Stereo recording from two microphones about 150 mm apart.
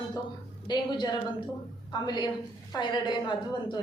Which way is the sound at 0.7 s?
30° left (ahead or behind).